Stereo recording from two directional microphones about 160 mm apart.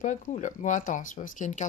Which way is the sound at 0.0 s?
50° left (ahead or behind).